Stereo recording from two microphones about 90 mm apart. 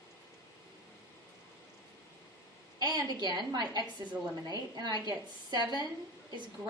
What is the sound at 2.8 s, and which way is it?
A woman's voice, 50° right (ahead or behind).